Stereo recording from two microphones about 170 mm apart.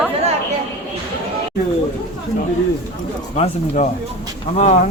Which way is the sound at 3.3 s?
40° left (ahead or behind).